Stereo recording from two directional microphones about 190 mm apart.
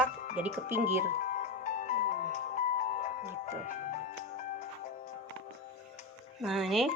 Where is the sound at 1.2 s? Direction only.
40° left (ahead or behind).